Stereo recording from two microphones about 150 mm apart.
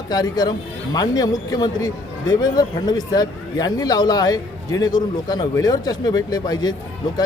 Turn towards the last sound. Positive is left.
turn(degrees=30)  # may be behind; listen again after turning